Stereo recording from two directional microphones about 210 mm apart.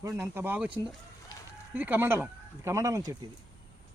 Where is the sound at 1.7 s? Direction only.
10° right (ahead or behind).